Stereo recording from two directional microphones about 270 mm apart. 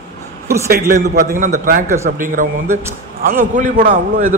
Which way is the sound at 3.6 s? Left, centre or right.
Right.